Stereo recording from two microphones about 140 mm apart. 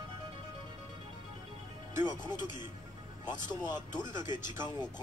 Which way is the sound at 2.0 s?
30° left (ahead or behind).